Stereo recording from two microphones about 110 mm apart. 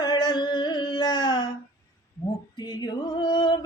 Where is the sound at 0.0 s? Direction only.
40° left (ahead or behind).